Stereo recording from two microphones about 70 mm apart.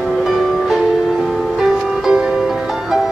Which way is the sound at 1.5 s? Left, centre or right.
Centre.